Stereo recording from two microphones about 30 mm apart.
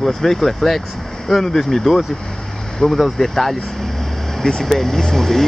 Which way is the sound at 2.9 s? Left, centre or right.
Centre.